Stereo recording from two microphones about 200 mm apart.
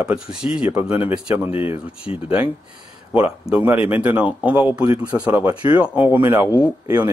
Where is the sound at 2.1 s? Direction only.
30° left (ahead or behind).